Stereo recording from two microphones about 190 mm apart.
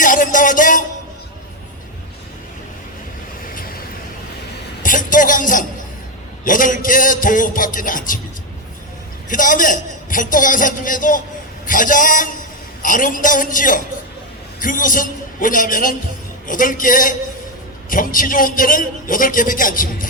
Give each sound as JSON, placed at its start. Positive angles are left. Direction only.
{"t": 0.0, "sound": "music", "side_deg": 45}
{"t": 4.8, "sound": "a sound", "side_deg": 45}
{"t": 6.4, "sound": "music", "side_deg": 45}
{"t": 9.3, "sound": "a man's voice", "side_deg": 45}